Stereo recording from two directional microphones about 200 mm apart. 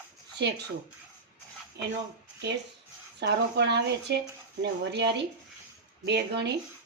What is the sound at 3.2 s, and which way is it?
Speech, 55° right (ahead or behind).